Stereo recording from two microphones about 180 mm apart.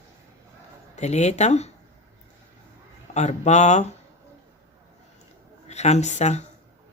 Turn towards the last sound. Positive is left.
turn(degrees=40)  # may be behind; listen again after turning